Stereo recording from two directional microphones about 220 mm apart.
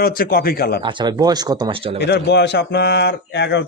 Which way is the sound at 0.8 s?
20° right (ahead or behind).